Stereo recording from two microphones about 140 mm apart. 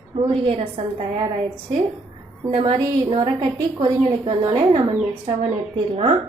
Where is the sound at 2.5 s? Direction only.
35° right (ahead or behind).